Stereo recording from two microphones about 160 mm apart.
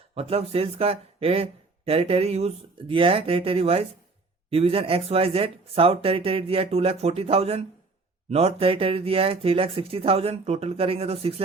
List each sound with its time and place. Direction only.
0.1 s speech: 40° right (ahead or behind)